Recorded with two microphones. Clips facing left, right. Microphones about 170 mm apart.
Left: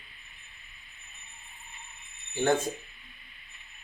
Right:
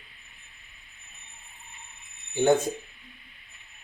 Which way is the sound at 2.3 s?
20° right (ahead or behind).